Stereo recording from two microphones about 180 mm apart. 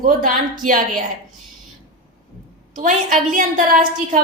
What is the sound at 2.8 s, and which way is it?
A woman's voice, 45° right (ahead or behind).